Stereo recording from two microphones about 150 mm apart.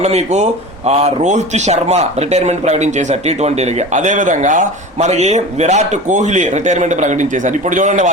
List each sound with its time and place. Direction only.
0.0 s speech: 45° right (ahead or behind)